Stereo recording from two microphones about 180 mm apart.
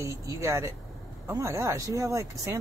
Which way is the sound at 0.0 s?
15° right (ahead or behind).